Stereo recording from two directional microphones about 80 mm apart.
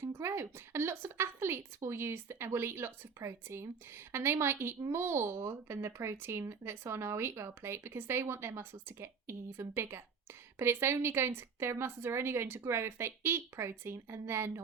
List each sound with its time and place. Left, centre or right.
0.0 s a woman's voice: right